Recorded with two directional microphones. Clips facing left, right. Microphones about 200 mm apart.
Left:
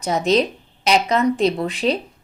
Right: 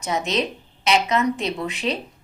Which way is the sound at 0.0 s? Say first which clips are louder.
Left 6 dB; 35° left (ahead or behind).